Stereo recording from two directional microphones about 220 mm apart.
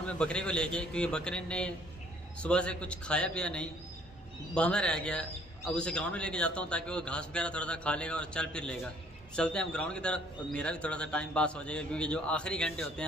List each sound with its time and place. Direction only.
0.0 s a man's voice: 5° left (ahead or behind)